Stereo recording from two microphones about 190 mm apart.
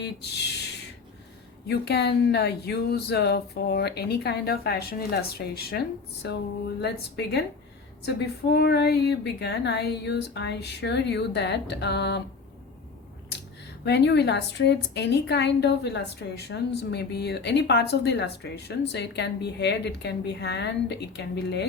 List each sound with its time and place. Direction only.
0.0 s a sound: 60° left (ahead or behind)
1.6 s a woman's voice: 60° left (ahead or behind)
13.8 s a woman's voice: 65° left (ahead or behind)